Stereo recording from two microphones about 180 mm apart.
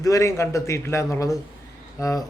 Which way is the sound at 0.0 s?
15° left (ahead or behind).